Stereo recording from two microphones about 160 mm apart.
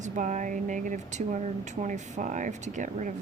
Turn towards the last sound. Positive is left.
turn(degrees=-50)  # may be behind; listen again after turning